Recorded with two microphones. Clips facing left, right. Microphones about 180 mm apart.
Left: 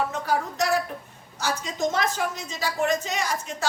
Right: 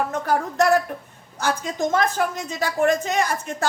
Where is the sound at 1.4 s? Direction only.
55° right (ahead or behind).